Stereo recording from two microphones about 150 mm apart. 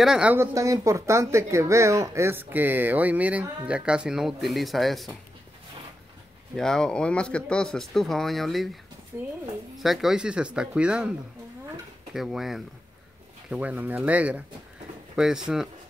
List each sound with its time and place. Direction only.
0.0 s speech: 5° right (ahead or behind)
6.5 s speech: 5° left (ahead or behind)
9.1 s speech: 15° right (ahead or behind)
9.8 s speech: centre (ahead or behind)